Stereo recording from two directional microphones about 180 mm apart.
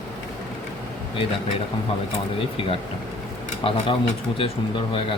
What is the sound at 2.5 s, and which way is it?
Speech, 30° left (ahead or behind).